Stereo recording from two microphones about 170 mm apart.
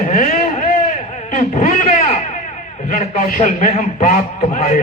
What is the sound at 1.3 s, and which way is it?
Guitar, 50° left (ahead or behind).